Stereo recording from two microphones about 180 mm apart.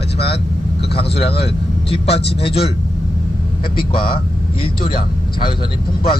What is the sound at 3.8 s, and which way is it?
Speech, 30° left (ahead or behind).